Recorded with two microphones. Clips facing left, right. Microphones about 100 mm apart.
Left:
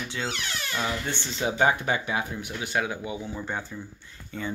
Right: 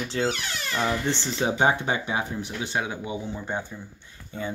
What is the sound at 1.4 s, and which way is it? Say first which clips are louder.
Speech: even; 30° right (ahead or behind).